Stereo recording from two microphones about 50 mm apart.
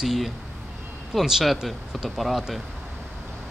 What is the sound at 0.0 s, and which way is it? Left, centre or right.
Speech, centre.